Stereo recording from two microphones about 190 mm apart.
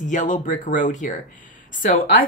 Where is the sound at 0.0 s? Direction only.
40° left (ahead or behind).